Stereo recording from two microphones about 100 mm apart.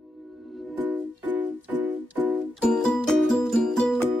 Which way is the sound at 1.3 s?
15° right (ahead or behind).